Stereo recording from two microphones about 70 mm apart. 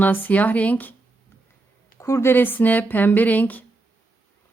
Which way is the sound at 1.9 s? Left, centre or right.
Left.